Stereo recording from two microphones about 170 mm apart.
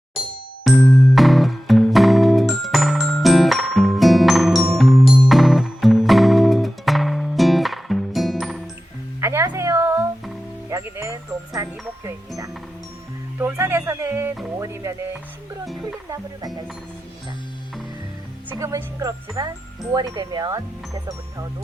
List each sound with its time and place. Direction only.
0.6 s music: 5° left (ahead or behind)
9.2 s a sound: 15° right (ahead or behind)
10.7 s music: 15° right (ahead or behind)
13.4 s music: 15° right (ahead or behind)
15.6 s music: centre (ahead or behind)
16.0 s music: 20° right (ahead or behind)
18.4 s music: 20° right (ahead or behind)